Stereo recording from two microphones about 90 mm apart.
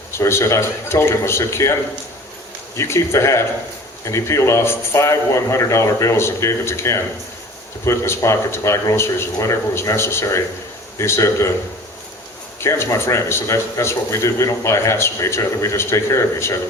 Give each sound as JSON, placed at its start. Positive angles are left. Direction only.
{"t": 0.1, "sound": "a man's voice", "side_deg": 30}
{"t": 2.7, "sound": "a man's voice", "side_deg": 30}
{"t": 12.5, "sound": "a man's voice", "side_deg": 30}